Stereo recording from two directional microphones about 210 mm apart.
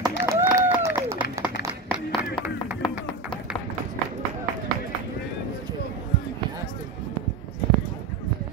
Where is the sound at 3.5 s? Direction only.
25° left (ahead or behind).